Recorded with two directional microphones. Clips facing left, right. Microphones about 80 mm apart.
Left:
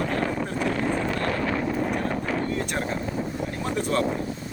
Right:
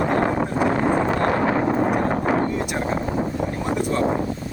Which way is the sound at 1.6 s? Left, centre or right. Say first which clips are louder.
Right 6 dB; right.